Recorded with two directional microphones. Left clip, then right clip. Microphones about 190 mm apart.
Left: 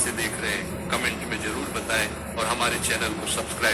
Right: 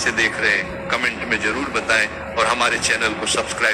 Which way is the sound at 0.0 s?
25° right (ahead or behind).